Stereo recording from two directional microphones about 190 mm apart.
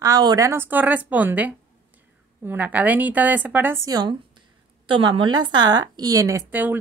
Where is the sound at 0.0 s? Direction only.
20° right (ahead or behind).